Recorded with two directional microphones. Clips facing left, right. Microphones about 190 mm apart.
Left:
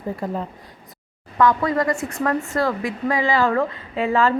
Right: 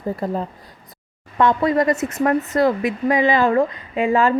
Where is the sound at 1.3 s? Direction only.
25° right (ahead or behind).